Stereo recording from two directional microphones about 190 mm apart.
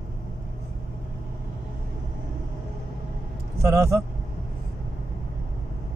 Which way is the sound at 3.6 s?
15° right (ahead or behind).